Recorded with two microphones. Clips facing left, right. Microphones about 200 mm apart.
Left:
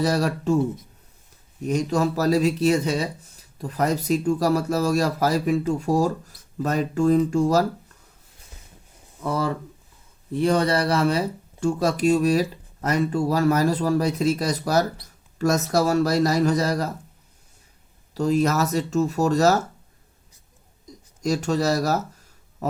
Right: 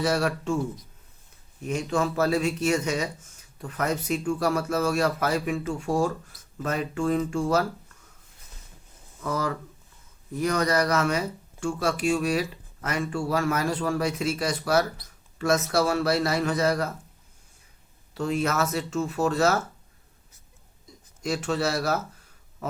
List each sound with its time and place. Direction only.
0.0 s speech: 35° left (ahead or behind)
1.6 s speech: 40° left (ahead or behind)
9.2 s speech: 30° left (ahead or behind)
18.1 s speech: 40° left (ahead or behind)
21.2 s speech: 40° left (ahead or behind)
22.6 s a sound: 40° left (ahead or behind)